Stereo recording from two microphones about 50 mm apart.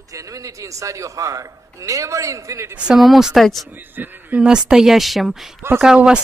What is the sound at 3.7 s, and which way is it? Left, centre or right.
Speech, right.